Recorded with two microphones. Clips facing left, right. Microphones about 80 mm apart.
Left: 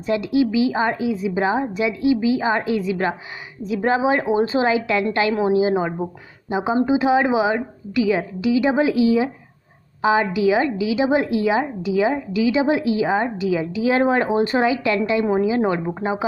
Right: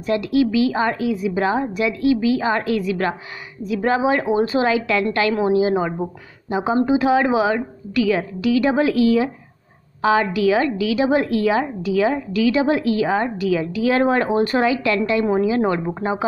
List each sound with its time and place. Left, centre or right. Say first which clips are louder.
0.0 s a woman's voice: right 1 dB; left